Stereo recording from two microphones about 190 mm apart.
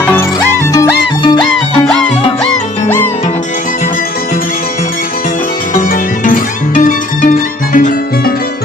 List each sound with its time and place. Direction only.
0.0 s music: 10° left (ahead or behind)
0.3 s music: 20° left (ahead or behind)
5.7 s music: 45° left (ahead or behind)